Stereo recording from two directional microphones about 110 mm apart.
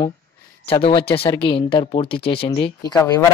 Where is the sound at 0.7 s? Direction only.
55° left (ahead or behind).